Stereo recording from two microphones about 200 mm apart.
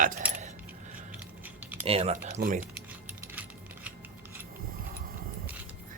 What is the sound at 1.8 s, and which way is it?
Speech, 30° right (ahead or behind).